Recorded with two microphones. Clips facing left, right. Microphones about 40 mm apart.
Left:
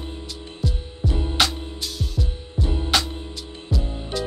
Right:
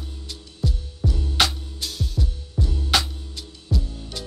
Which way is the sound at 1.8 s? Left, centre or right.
Centre.